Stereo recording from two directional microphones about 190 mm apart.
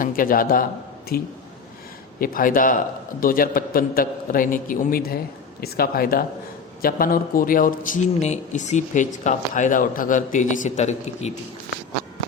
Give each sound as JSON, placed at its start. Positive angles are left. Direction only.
{"t": 0.0, "sound": "a man's voice", "side_deg": 50}